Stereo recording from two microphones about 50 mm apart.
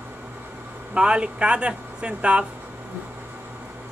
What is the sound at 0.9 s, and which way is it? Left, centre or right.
Speech, centre.